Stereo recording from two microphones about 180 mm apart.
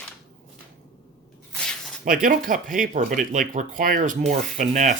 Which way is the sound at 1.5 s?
5° left (ahead or behind).